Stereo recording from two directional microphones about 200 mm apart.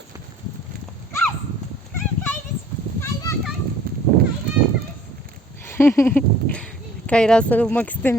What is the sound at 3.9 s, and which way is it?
Children playing, 45° right (ahead or behind).